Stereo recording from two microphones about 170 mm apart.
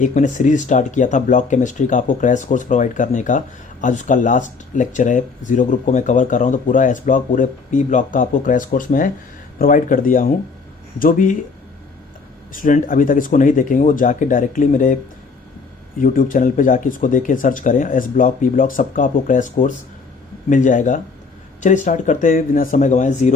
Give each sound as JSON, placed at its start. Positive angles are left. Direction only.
{"t": 0.0, "sound": "speech", "side_deg": 45}
{"t": 12.5, "sound": "speech", "side_deg": 50}
{"t": 16.0, "sound": "speech", "side_deg": 55}